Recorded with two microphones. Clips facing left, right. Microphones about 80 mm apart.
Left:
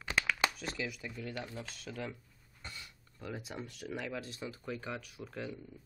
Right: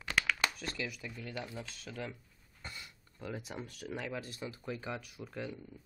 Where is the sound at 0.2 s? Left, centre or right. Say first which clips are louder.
Left 1 dB; centre.